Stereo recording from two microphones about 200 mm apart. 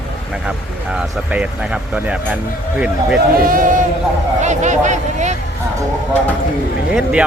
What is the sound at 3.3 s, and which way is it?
A man's voice, 45° right (ahead or behind).